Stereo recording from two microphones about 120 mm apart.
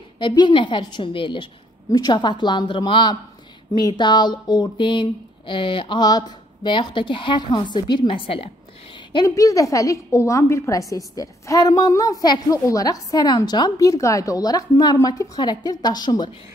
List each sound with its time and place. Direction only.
0.2 s a woman's voice: 40° left (ahead or behind)
6.0 s a woman's voice: 35° left (ahead or behind)
9.1 s a woman's voice: 30° left (ahead or behind)